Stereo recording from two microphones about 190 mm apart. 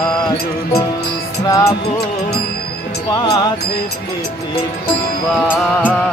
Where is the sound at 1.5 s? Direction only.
20° left (ahead or behind).